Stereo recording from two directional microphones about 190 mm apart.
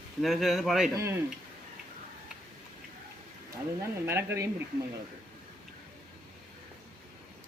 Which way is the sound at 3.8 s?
15° right (ahead or behind).